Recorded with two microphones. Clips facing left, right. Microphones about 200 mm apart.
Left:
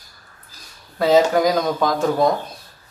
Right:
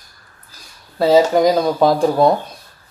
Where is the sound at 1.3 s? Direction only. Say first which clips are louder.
Right 4 dB; 25° right (ahead or behind).